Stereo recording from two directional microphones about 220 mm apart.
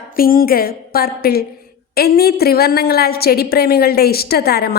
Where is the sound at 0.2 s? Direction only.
40° left (ahead or behind).